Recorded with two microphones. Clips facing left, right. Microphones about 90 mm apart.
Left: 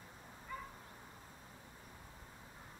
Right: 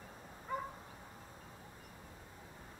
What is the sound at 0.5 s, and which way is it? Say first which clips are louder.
Dog: right 7 dB; 30° right (ahead or behind).